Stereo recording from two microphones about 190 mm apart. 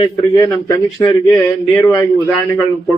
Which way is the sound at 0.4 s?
20° left (ahead or behind).